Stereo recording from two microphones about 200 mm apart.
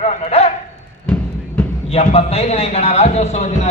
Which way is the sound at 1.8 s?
30° left (ahead or behind).